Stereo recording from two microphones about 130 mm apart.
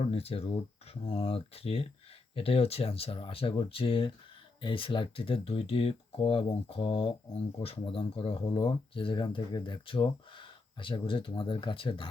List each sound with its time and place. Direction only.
0.0 s speech: 50° left (ahead or behind)